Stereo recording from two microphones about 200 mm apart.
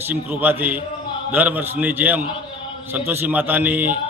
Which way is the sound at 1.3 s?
10° right (ahead or behind).